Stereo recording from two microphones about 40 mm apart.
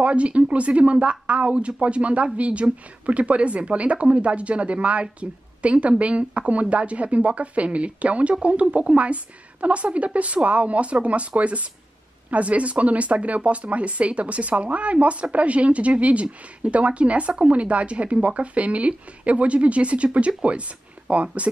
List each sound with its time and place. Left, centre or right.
0.0 s speech: right